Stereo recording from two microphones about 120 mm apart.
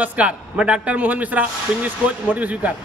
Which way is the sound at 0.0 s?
10° right (ahead or behind).